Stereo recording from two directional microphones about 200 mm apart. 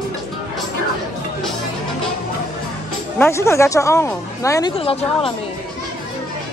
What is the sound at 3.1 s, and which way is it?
A woman's voice, 10° left (ahead or behind).